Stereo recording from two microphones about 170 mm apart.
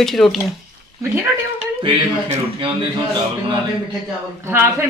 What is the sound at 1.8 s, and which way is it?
Speech, 30° right (ahead or behind).